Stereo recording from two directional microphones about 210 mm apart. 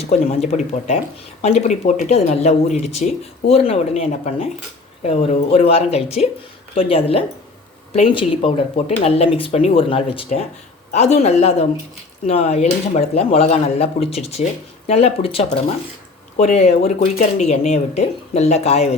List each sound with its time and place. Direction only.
0.1 s speech: 30° left (ahead or behind)